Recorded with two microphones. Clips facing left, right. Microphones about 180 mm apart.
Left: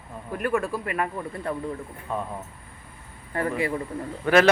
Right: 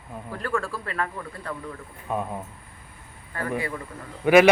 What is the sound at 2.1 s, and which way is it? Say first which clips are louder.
Speech: right 2 dB; 10° right (ahead or behind).